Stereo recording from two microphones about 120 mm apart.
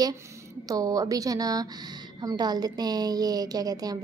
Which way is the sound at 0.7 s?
30° right (ahead or behind).